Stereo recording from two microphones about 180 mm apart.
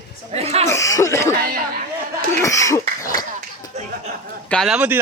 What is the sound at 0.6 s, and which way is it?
Chuckle, 15° left (ahead or behind).